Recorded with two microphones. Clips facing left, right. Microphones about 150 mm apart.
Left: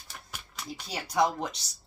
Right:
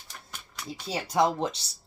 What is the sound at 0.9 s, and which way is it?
Speech, 30° right (ahead or behind).